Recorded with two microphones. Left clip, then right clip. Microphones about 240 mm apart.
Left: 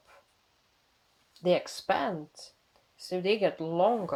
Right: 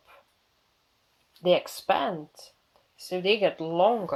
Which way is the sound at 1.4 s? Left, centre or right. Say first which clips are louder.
Right 4 dB; centre.